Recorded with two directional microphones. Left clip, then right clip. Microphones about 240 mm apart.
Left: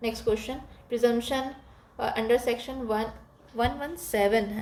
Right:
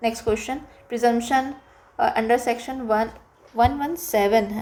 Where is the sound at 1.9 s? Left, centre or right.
Right.